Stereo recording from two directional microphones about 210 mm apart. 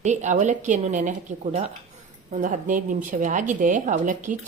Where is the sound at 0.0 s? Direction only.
35° right (ahead or behind).